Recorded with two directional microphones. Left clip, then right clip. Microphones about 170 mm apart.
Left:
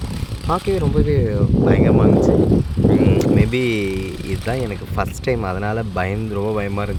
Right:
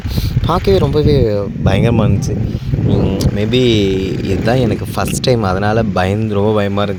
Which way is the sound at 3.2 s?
20° right (ahead or behind).